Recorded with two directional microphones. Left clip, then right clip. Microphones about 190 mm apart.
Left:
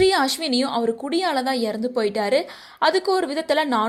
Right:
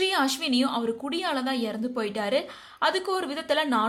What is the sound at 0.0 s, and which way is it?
A woman's voice, 25° left (ahead or behind).